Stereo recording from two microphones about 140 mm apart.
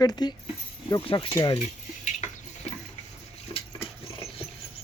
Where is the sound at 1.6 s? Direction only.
55° left (ahead or behind).